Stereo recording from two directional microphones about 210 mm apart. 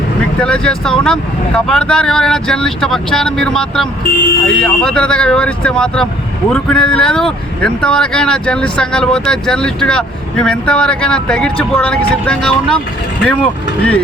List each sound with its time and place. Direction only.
0.3 s speech: 5° left (ahead or behind)